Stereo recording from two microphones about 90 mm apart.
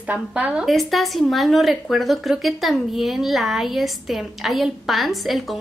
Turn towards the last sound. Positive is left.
turn(degrees=0)  # may be behind; listen again after turning